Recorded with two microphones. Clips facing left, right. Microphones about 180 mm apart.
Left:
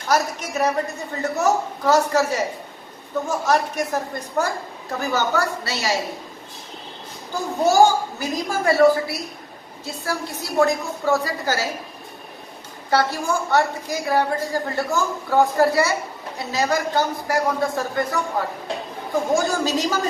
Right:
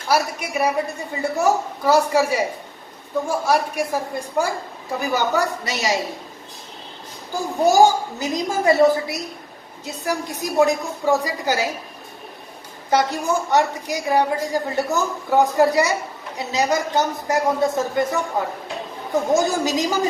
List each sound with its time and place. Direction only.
0.1 s a woman's voice: 10° right (ahead or behind)
8.2 s a woman's voice: 20° right (ahead or behind)
12.9 s a woman's voice: 20° right (ahead or behind)